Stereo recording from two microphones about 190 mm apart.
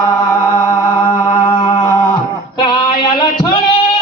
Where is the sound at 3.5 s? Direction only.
25° left (ahead or behind).